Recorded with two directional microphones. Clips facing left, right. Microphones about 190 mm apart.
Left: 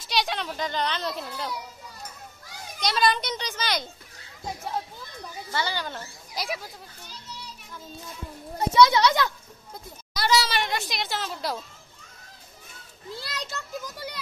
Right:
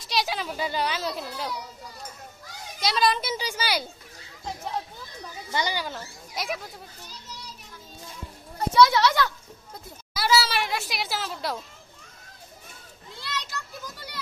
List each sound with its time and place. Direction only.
0.0 s speech: centre (ahead or behind)
2.8 s speech: centre (ahead or behind)
5.5 s speech: 15° right (ahead or behind)
5.9 s speech: centre (ahead or behind)
8.5 s speech: 20° left (ahead or behind)
10.1 s a sound: 5° right (ahead or behind)
13.1 s children playing: 35° left (ahead or behind)